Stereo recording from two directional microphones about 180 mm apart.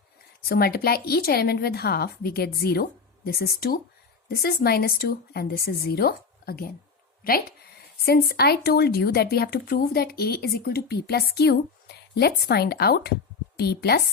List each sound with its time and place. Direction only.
0.4 s speech: 55° left (ahead or behind)